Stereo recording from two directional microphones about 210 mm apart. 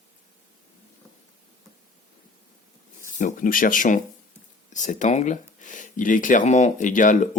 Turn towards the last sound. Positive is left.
turn(degrees=40)  # may be behind; listen again after turning